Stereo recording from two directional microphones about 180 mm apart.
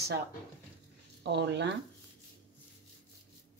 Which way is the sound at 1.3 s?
70° right (ahead or behind).